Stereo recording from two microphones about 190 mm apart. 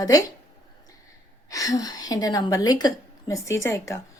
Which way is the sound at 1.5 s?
20° left (ahead or behind).